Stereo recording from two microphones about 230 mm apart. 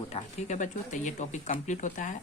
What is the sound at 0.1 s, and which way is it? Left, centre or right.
Speech, left.